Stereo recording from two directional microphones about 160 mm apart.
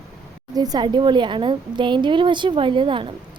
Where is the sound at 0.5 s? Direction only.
25° right (ahead or behind).